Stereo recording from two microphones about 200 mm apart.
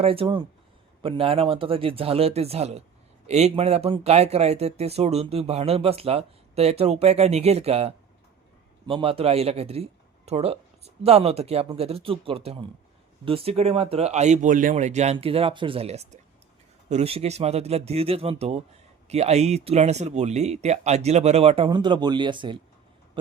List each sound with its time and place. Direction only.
0.0 s speech: 25° right (ahead or behind)